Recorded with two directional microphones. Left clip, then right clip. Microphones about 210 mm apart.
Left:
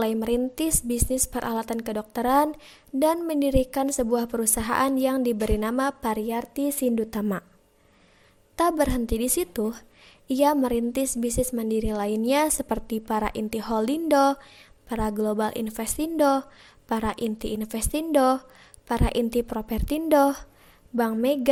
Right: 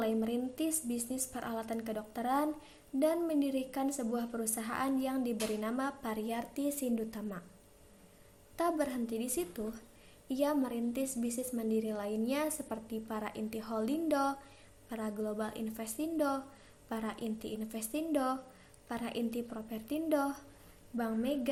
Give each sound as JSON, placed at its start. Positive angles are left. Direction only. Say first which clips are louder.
{"t": 0.0, "sound": "a woman's voice", "louder": "left 10 dB", "side_deg": 50}
{"t": 8.5, "sound": "a woman's voice", "louder": "left 11 dB", "side_deg": 45}